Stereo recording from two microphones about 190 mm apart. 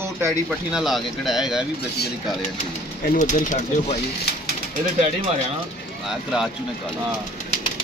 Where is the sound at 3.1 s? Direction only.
40° left (ahead or behind).